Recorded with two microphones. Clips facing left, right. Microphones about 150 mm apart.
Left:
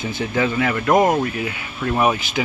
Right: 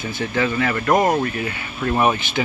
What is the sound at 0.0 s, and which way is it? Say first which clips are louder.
Speech: left 1 dB; 15° left (ahead or behind).